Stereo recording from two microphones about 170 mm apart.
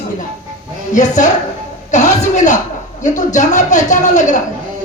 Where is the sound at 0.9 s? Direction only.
45° left (ahead or behind).